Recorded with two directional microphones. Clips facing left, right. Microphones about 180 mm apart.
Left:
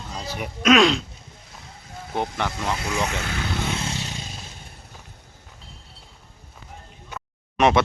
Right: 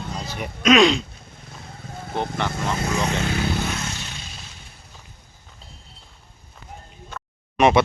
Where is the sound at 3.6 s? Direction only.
25° left (ahead or behind).